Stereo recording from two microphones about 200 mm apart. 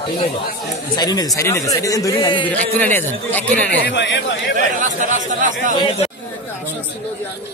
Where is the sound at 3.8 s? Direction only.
60° left (ahead or behind).